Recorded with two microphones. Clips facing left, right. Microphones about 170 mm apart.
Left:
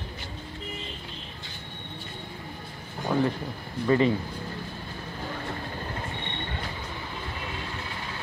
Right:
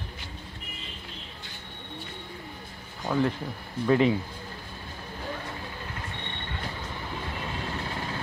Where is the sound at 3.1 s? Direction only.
5° left (ahead or behind).